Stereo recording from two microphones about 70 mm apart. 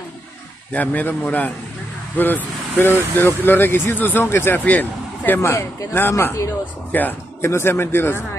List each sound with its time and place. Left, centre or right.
0.7 s speech: left
4.6 s speech: left
5.4 s speech: left
7.4 s speech: left